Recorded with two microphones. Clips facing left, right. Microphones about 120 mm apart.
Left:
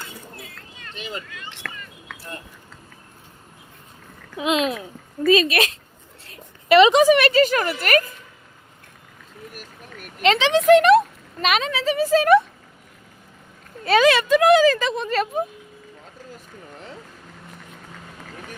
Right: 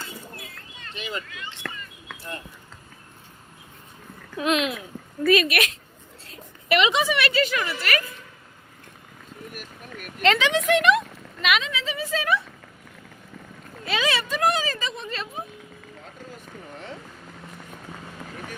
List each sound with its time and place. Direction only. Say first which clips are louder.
0.9 s speech: even; 40° left (ahead or behind)
1.6 s a sound: right 1 dB; 15° right (ahead or behind)
4.4 s a woman's voice: left 2 dB; 20° left (ahead or behind); by 8.1 s 45° left (ahead or behind)
10.2 s speech: left 3 dB; 25° left (ahead or behind); by 12.4 s 45° left (ahead or behind)
14.0 s speech: left 7 dB; 80° left; by 15.4 s 55° left (ahead or behind)